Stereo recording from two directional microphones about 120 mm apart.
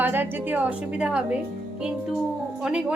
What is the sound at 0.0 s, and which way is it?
A woman's voice, 15° right (ahead or behind).